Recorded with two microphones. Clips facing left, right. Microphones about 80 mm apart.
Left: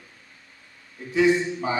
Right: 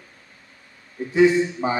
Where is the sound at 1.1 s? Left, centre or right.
Right.